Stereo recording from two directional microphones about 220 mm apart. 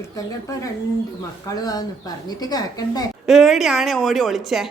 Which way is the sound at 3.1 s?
Centre (ahead or behind).